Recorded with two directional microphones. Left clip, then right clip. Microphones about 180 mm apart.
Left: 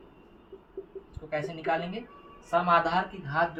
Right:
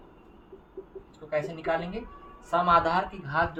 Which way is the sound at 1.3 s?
15° right (ahead or behind).